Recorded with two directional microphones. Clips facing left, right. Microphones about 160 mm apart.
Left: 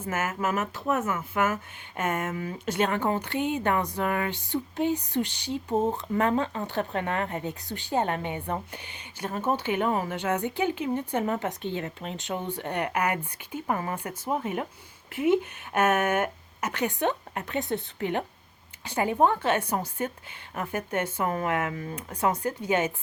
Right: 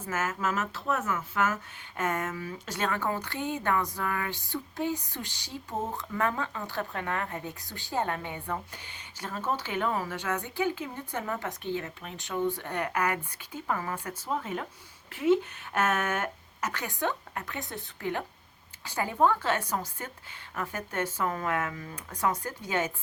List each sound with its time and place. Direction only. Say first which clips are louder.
0.1 s a woman's voice: left 2 dB; 15° left (ahead or behind)